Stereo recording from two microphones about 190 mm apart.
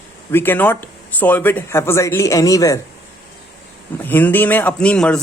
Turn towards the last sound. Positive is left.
turn(degrees=5)  # may be behind; listen again after turning